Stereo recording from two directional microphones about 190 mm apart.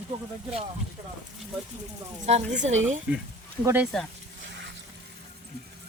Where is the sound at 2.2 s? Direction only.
35° right (ahead or behind).